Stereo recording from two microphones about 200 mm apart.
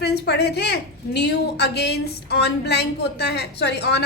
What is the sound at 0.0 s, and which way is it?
A woman's voice, 55° left (ahead or behind).